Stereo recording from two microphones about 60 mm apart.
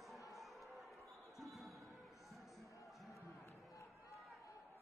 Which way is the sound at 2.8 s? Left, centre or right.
Centre.